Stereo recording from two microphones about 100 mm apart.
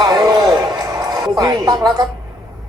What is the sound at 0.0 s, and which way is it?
Music, 45° right (ahead or behind).